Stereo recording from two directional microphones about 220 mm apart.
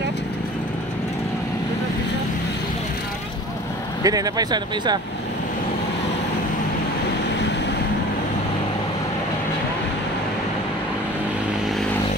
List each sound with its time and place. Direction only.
4.0 s speech: 15° right (ahead or behind)